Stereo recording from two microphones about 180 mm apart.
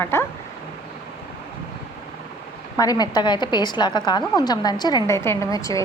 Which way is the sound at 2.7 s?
20° left (ahead or behind).